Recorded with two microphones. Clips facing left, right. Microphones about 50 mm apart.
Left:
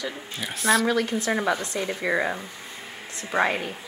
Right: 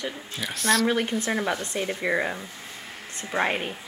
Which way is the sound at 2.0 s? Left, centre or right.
Centre.